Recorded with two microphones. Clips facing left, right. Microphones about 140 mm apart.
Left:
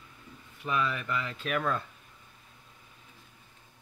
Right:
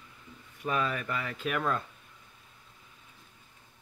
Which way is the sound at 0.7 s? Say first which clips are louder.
Even; 40° right (ahead or behind).